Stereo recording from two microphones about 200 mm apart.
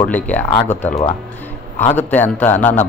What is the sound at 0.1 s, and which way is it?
Speech, 5° left (ahead or behind).